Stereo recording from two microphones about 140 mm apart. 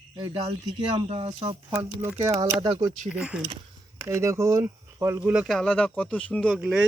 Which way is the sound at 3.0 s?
10° right (ahead or behind).